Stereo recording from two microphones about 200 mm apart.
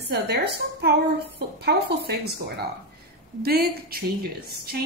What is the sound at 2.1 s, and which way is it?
A woman's voice, 55° right (ahead or behind).